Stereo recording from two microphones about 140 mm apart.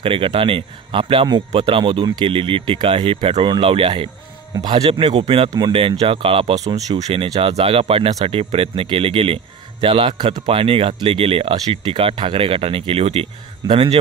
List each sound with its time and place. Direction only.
0.0 s speech: 40° right (ahead or behind)
4.6 s speech: 25° right (ahead or behind); by 13.9 s 40° right (ahead or behind)